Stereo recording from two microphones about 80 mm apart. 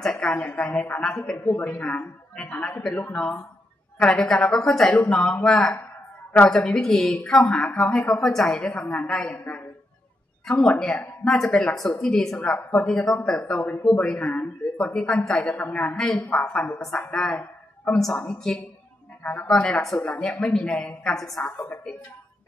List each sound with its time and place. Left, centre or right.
0.0 s a sound: centre
0.3 s a woman's voice: centre
10.4 s a woman's voice: centre
13.4 s a woman's voice: centre
17.1 s a woman's voice: centre
19.4 s a woman's voice: centre
21.5 s a woman's voice: centre